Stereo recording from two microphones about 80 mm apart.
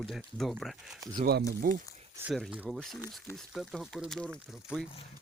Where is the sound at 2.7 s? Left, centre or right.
Centre.